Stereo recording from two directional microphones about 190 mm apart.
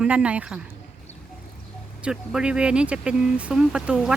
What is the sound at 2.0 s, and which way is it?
Speech, 5° right (ahead or behind).